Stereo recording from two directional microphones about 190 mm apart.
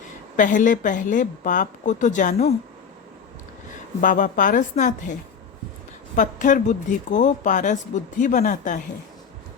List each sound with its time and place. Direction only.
0.3 s a woman's voice: 40° left (ahead or behind)
4.0 s a woman's voice: 45° left (ahead or behind)
6.1 s speech: 40° left (ahead or behind)